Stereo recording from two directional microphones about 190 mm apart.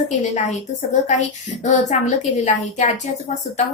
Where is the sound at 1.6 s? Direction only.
40° left (ahead or behind).